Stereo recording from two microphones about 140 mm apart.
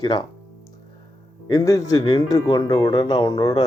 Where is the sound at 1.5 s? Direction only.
25° left (ahead or behind).